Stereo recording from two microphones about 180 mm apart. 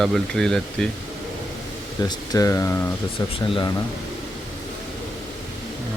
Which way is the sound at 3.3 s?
30° left (ahead or behind).